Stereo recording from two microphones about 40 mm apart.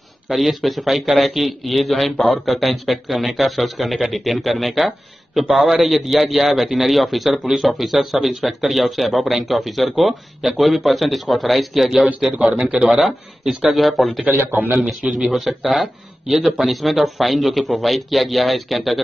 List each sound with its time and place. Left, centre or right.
0.3 s a man's voice: centre
12.5 s a man's voice: centre
14.2 s a man's voice: right
14.9 s a man's voice: centre